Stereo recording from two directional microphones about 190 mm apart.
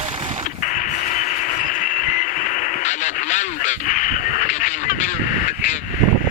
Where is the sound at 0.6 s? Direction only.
45° left (ahead or behind).